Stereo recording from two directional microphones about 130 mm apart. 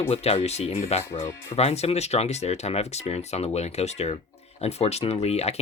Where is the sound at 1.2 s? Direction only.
20° left (ahead or behind).